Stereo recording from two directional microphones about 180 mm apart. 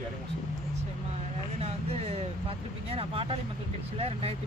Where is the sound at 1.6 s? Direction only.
35° right (ahead or behind).